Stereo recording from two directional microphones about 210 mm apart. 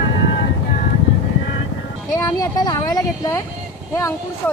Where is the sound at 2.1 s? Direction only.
15° left (ahead or behind).